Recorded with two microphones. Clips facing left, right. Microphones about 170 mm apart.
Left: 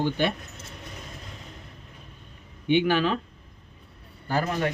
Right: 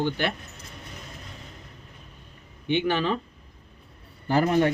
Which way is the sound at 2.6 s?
10° left (ahead or behind).